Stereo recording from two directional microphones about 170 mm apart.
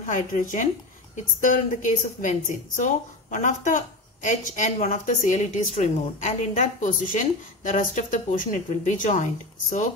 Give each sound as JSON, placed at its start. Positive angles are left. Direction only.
{"t": 0.0, "sound": "a woman's voice", "side_deg": 50}